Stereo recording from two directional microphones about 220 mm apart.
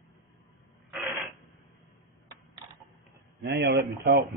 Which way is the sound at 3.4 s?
50° right (ahead or behind).